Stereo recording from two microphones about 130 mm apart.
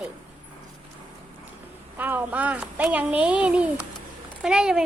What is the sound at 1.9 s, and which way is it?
A child's voice, 15° right (ahead or behind).